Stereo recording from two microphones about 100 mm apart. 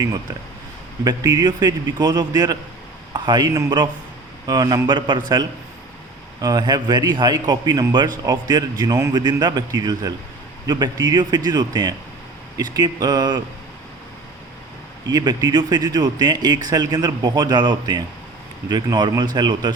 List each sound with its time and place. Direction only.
1.0 s a man's voice: 40° right (ahead or behind)
15.0 s speech: 45° right (ahead or behind)